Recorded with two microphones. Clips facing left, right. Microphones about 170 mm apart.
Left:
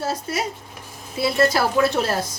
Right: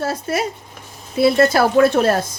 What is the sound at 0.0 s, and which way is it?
Speech, 55° right (ahead or behind).